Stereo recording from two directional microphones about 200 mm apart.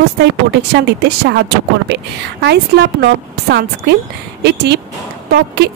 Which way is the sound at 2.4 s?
60° right (ahead or behind).